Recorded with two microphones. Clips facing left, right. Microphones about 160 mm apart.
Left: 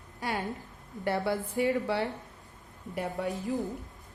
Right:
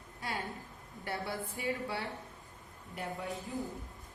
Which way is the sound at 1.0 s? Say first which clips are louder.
Left 9 dB; 85° left.